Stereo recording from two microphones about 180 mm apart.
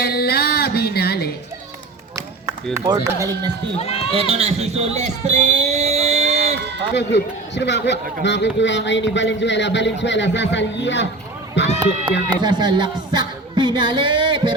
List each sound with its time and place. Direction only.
0.0 s music: 60° left (ahead or behind)
2.7 s speech: 15° right (ahead or behind)
3.8 s run: 35° left (ahead or behind)
4.1 s a sound: 35° right (ahead or behind)
6.9 s a man's voice: 75° left (ahead or behind)
11.6 s run: 75° left (ahead or behind)
12.3 s speech: 25° right (ahead or behind)